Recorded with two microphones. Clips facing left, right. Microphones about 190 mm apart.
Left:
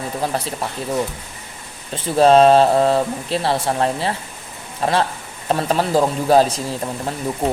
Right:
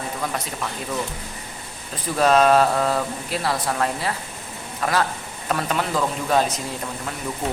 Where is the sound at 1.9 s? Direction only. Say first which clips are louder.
Left 6 dB; 30° left (ahead or behind).